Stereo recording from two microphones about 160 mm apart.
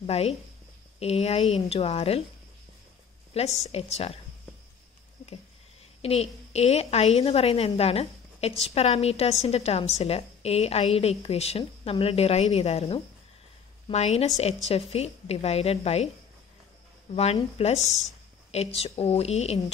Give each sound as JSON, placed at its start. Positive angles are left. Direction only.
{"t": 0.0, "sound": "a woman's voice", "side_deg": 40}
{"t": 3.6, "sound": "a woman's voice", "side_deg": 40}
{"t": 6.0, "sound": "a woman's voice", "side_deg": 40}
{"t": 17.1, "sound": "a woman's voice", "side_deg": 40}